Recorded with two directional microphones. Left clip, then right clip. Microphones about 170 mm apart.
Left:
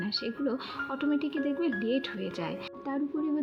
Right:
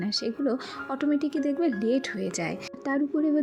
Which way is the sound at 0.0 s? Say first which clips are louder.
Right 4 dB; 30° right (ahead or behind).